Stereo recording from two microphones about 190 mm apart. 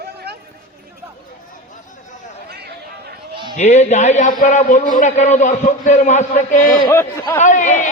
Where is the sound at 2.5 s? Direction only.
55° right (ahead or behind).